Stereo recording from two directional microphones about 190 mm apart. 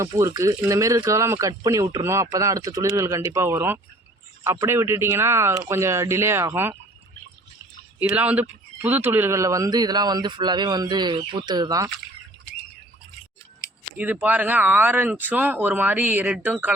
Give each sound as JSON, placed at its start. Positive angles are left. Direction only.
{"t": 0.0, "sound": "speech", "side_deg": -15}
{"t": 8.1, "sound": "speech", "side_deg": -5}
{"t": 14.0, "sound": "speech", "side_deg": -10}